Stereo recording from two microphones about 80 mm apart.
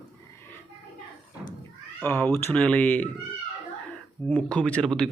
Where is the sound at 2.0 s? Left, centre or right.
Left.